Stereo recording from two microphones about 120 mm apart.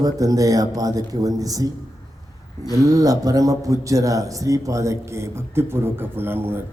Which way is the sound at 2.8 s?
30° right (ahead or behind).